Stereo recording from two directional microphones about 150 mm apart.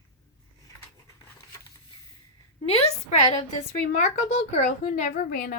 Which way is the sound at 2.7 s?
40° left (ahead or behind).